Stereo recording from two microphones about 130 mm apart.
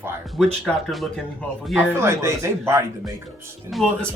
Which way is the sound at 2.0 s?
20° right (ahead or behind).